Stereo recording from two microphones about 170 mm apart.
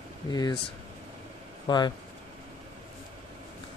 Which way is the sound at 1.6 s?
25° left (ahead or behind).